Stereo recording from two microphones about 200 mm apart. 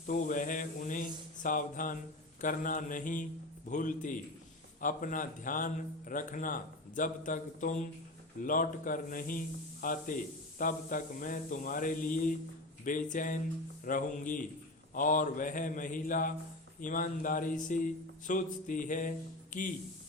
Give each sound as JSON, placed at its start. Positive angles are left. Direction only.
{"t": 0.1, "sound": "a man's voice", "side_deg": 40}